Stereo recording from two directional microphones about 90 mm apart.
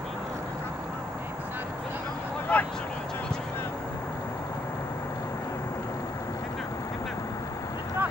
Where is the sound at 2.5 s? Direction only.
15° left (ahead or behind).